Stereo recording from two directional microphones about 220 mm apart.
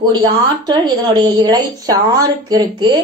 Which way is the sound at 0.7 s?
20° right (ahead or behind).